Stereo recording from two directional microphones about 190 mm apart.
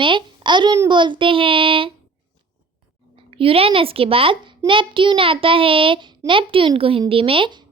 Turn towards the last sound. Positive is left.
turn(degrees=-25)  # may be behind; listen again after turning